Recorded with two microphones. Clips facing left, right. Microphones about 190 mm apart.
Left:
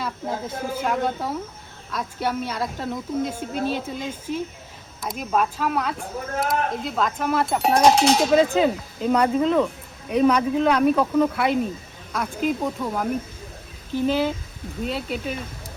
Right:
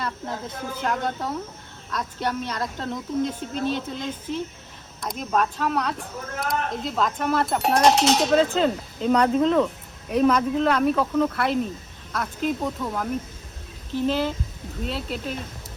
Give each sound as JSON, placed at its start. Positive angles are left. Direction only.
{"t": 0.4, "sound": "speech", "side_deg": 5}